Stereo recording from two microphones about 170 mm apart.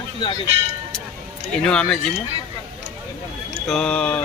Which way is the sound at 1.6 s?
5° left (ahead or behind).